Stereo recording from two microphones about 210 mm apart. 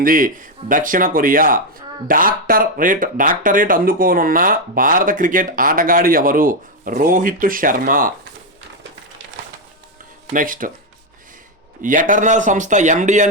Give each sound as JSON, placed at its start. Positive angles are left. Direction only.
{"t": 0.0, "sound": "speech", "side_deg": -40}
{"t": 10.3, "sound": "speech", "side_deg": -40}
{"t": 11.8, "sound": "speech", "side_deg": -40}